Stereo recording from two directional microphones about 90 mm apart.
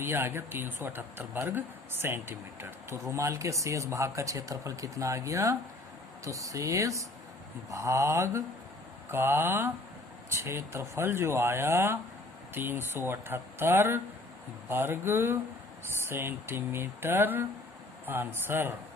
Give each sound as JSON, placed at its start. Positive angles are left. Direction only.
{"t": 0.0, "sound": "speech", "side_deg": -25}